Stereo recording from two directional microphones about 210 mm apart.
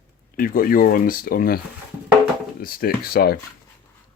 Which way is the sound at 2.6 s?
45° left (ahead or behind).